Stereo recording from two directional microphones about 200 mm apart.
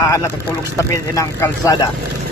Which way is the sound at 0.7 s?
15° left (ahead or behind).